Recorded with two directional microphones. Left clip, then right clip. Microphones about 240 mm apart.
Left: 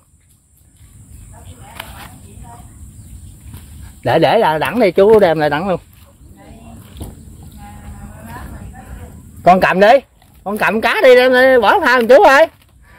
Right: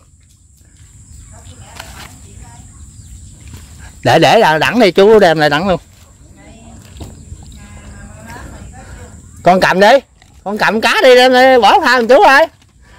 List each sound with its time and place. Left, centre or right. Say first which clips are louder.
4.0 s speech: right 4 dB; right
9.4 s speech: right 1 dB; right; by 12.5 s centre